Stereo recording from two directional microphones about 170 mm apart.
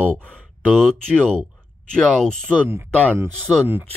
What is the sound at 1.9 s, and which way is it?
Speech, 5° left (ahead or behind).